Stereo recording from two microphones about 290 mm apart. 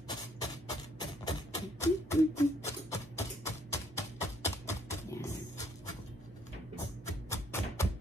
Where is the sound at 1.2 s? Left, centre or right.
Centre.